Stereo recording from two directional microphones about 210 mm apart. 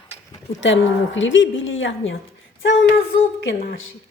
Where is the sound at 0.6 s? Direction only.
60° left (ahead or behind).